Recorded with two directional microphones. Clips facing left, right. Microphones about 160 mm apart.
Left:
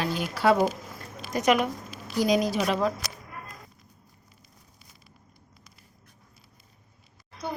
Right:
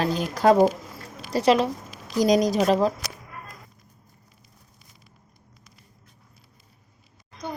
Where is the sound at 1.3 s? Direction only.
30° right (ahead or behind).